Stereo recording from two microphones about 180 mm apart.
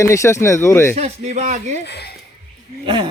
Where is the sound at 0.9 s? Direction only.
40° right (ahead or behind).